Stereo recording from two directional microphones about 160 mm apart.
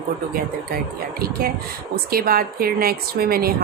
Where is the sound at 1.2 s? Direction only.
70° right (ahead or behind).